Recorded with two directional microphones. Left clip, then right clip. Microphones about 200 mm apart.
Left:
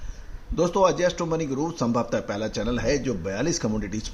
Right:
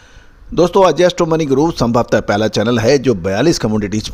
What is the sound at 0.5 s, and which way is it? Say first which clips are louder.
Speech: right 11 dB; 50° right (ahead or behind).